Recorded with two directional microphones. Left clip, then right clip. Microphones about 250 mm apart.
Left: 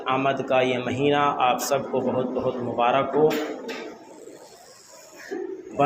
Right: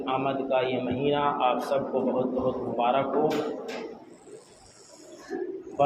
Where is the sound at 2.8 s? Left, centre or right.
Left.